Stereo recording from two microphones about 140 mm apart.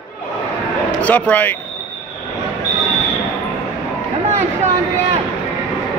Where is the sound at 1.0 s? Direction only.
10° left (ahead or behind).